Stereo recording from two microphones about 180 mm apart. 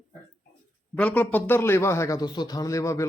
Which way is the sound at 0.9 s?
5° left (ahead or behind).